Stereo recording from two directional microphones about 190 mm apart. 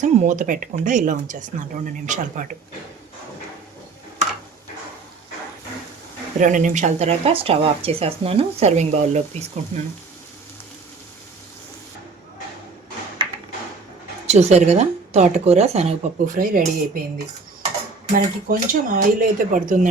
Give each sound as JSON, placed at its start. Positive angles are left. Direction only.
{"t": 0.0, "sound": "speech", "side_deg": -40}
{"t": 6.4, "sound": "speech", "side_deg": -40}
{"t": 14.3, "sound": "speech", "side_deg": -35}
{"t": 18.1, "sound": "speech", "side_deg": -45}